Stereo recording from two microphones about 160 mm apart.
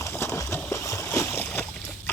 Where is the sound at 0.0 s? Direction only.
15° left (ahead or behind).